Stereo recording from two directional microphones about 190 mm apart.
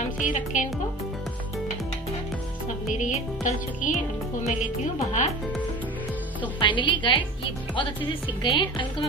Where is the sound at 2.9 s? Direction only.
40° left (ahead or behind).